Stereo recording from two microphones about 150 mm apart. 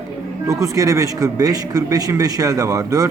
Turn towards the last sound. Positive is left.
turn(degrees=-25)  # may be behind; listen again after turning